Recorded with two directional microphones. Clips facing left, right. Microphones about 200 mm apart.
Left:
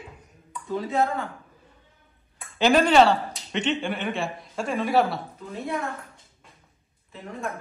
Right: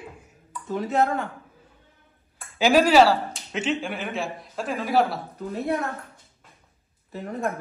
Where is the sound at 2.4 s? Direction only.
5° right (ahead or behind).